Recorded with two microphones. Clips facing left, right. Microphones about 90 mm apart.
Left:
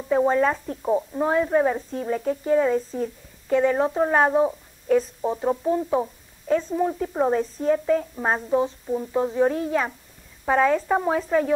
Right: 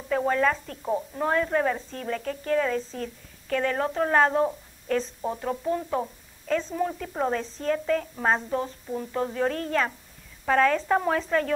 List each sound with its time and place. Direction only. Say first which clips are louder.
0.1 s speech: left 4 dB; 20° left (ahead or behind)